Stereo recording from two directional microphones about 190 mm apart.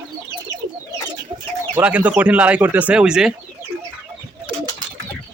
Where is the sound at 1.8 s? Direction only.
10° right (ahead or behind).